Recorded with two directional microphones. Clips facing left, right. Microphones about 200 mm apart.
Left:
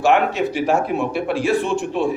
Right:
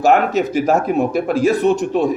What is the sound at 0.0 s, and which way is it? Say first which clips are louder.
A man's voice: right 3 dB; 40° right (ahead or behind).